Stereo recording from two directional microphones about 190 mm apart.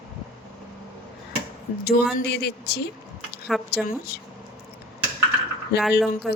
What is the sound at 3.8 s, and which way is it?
Speech, 55° left (ahead or behind).